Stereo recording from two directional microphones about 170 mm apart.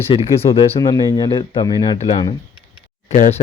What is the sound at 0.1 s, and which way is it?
Speech, 30° left (ahead or behind).